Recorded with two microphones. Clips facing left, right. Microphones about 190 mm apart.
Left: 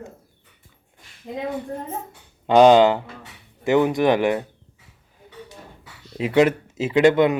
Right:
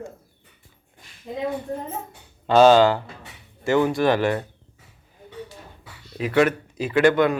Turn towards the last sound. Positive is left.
turn(degrees=20)  # may be behind; listen again after turning